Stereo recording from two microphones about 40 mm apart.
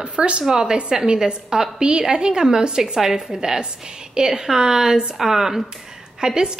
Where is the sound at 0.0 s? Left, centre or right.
Right.